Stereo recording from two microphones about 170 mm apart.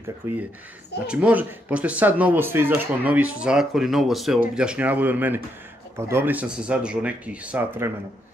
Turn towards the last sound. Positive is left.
turn(degrees=-10)  # may be behind; listen again after turning